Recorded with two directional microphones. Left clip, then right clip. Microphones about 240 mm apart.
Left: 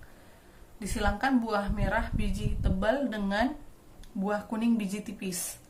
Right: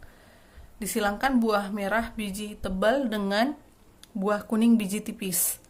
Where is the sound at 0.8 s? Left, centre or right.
Right.